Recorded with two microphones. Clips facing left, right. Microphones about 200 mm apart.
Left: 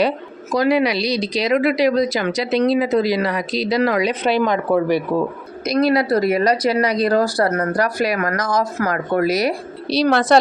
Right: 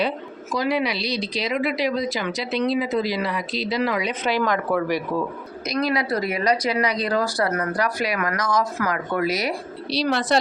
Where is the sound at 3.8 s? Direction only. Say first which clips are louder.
Left 6 dB; 40° left (ahead or behind).